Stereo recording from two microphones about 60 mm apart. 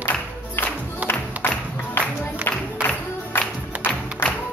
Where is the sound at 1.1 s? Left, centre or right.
Left.